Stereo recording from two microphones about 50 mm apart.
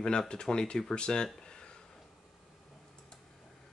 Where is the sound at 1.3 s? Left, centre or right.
Centre.